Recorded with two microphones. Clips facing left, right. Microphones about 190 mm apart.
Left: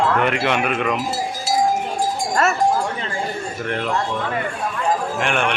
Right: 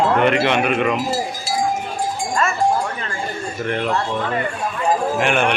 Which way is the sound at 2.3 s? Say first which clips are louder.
Left 2 dB; 70° left (ahead or behind).